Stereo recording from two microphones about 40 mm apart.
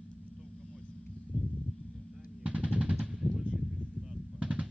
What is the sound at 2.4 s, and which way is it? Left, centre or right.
Machine gun, right.